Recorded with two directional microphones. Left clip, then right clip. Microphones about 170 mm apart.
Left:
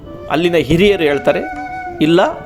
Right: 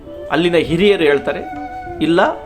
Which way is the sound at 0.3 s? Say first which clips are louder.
Left 1 dB; 40° left (ahead or behind).